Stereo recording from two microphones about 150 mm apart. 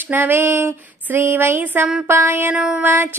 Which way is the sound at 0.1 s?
15° right (ahead or behind).